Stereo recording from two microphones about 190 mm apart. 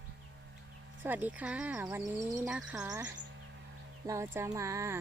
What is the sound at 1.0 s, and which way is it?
Speech, 10° right (ahead or behind).